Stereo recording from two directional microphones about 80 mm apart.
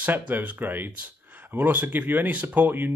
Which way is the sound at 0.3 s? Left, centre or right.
Right.